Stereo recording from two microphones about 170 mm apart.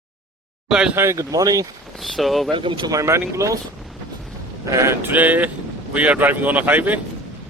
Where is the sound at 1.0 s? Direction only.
15° right (ahead or behind).